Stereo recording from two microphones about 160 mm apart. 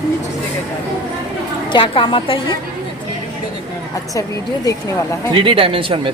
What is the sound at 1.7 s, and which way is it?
Speech, 30° left (ahead or behind).